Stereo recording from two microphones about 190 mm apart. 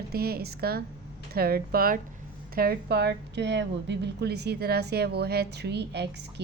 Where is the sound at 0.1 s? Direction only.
55° right (ahead or behind).